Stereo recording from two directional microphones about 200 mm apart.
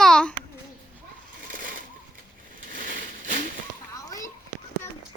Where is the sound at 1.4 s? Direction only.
45° right (ahead or behind).